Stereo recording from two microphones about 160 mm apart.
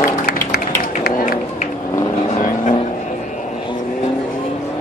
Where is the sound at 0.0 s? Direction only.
60° left (ahead or behind).